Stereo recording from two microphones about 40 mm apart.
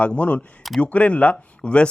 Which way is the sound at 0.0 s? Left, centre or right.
Left.